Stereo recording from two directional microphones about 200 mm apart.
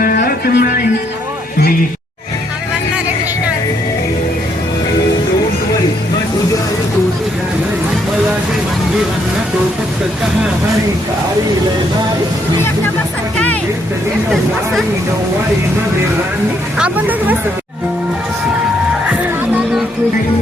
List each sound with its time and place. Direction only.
0.0 s music: 45° left (ahead or behind)
13.3 s music: 5° left (ahead or behind)
14.3 s chatter: centre (ahead or behind)
16.7 s music: 5° right (ahead or behind)